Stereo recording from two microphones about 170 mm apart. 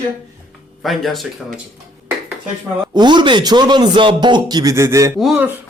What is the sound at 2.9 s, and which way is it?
Speech, 25° right (ahead or behind).